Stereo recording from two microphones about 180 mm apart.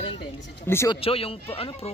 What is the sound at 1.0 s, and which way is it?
Speech, 30° left (ahead or behind).